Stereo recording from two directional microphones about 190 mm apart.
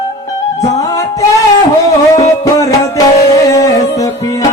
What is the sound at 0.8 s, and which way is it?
Music, 15° left (ahead or behind).